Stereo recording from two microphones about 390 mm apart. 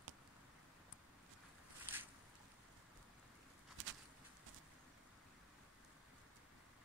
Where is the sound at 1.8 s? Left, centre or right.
Centre.